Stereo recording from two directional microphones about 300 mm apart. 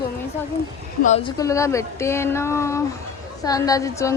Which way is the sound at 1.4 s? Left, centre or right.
Centre.